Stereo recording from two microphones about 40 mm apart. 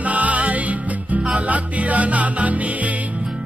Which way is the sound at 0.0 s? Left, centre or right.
Right.